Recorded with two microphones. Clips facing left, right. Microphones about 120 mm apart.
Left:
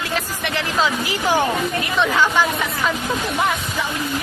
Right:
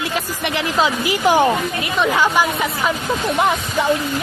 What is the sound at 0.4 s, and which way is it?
Speech, 15° right (ahead or behind).